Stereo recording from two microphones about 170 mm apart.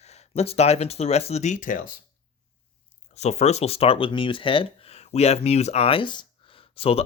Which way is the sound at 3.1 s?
40° left (ahead or behind).